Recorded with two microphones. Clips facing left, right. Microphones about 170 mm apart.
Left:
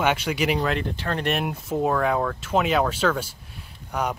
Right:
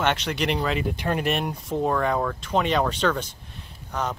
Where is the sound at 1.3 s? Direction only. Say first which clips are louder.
Even; 5° left (ahead or behind).